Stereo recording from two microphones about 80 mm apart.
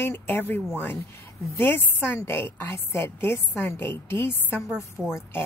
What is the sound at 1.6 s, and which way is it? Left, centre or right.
Speech, left.